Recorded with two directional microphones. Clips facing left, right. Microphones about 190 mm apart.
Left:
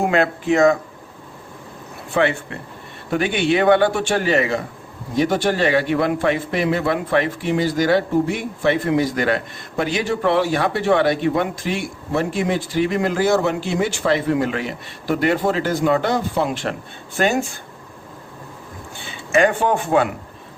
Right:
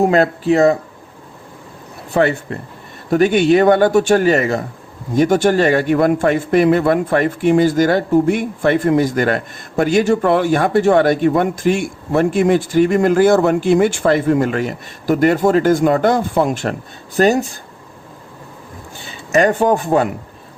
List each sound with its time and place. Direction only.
0.0 s speech: 35° right (ahead or behind)
2.1 s a man's voice: 40° right (ahead or behind)
19.0 s speech: 40° right (ahead or behind)